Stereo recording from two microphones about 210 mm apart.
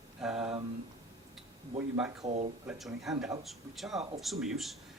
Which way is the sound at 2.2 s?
35° right (ahead or behind).